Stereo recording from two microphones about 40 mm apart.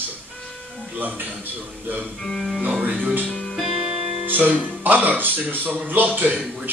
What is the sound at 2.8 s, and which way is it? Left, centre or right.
Speech, right.